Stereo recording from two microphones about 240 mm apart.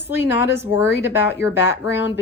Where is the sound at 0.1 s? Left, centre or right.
Centre.